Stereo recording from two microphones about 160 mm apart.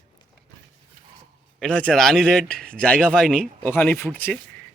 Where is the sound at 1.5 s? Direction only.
5° left (ahead or behind).